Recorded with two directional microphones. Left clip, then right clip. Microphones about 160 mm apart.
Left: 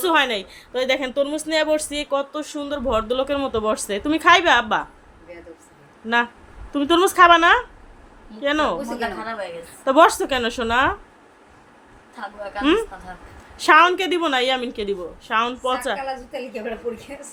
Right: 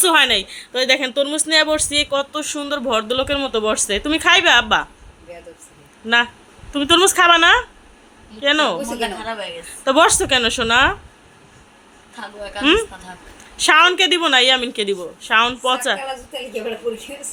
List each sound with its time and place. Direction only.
0.0 s speech: centre (ahead or behind)
6.7 s speech: centre (ahead or behind)
9.0 s a woman's voice: 15° right (ahead or behind)
9.8 s speech: centre (ahead or behind)
13.6 s speech: centre (ahead or behind)